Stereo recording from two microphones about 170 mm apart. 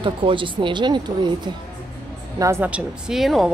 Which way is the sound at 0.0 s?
30° right (ahead or behind).